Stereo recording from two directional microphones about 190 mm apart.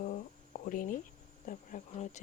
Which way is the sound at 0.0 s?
45° left (ahead or behind).